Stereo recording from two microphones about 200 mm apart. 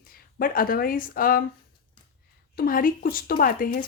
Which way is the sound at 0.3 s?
45° left (ahead or behind).